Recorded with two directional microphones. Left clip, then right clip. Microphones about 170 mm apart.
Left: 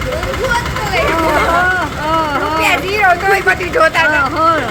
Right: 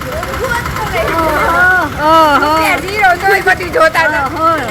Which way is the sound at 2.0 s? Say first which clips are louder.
Right 9 dB; 90° right.